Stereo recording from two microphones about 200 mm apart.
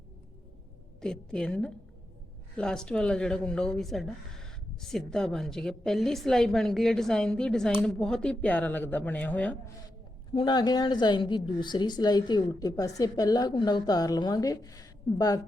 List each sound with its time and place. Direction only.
1.0 s speech: 5° left (ahead or behind)
10.3 s a woman's voice: 20° left (ahead or behind)